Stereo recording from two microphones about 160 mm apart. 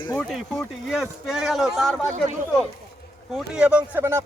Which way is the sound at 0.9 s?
5° right (ahead or behind).